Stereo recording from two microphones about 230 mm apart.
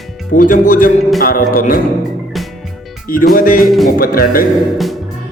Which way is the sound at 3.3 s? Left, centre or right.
Left.